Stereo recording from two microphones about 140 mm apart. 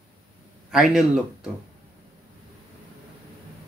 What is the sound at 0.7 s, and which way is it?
Speech, 5° right (ahead or behind).